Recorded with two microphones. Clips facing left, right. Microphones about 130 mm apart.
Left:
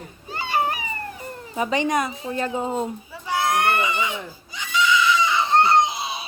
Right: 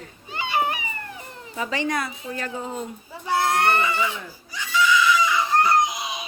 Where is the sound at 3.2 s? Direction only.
20° left (ahead or behind).